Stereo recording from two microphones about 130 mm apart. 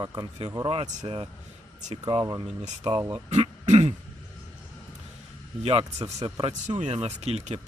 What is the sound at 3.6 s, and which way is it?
Throat clearing, 55° right (ahead or behind).